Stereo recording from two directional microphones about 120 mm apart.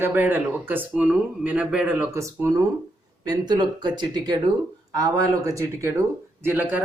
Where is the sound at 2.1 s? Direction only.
25° right (ahead or behind).